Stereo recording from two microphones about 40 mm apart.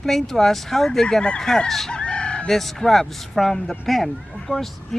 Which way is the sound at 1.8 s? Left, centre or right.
Left.